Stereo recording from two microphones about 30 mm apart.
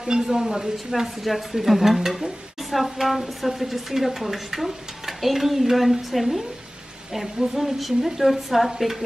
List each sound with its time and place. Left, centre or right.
0.0 s speech: centre